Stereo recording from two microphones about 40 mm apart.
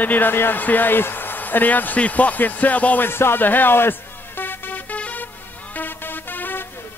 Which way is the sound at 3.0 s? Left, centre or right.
Left.